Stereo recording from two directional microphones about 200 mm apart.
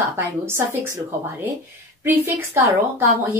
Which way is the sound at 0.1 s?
10° right (ahead or behind).